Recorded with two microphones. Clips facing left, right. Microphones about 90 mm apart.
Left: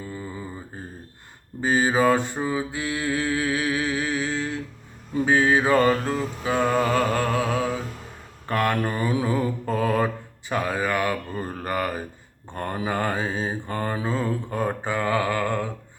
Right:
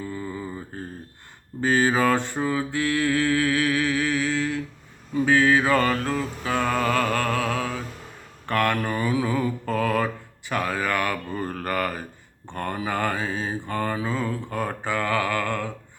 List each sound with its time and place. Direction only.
0.0 s mantra: 20° left (ahead or behind)
0.7 s a sound: 20° left (ahead or behind)
1.6 s mantra: 15° left (ahead or behind)